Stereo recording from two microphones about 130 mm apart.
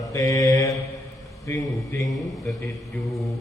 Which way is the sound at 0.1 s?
25° left (ahead or behind).